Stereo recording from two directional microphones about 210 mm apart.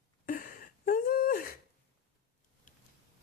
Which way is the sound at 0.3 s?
40° left (ahead or behind).